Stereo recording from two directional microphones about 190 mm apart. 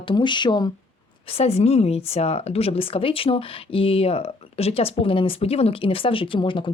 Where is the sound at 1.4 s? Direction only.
35° left (ahead or behind).